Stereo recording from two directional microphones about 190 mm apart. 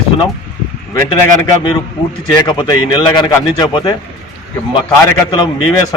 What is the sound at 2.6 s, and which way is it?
Speech, 25° left (ahead or behind).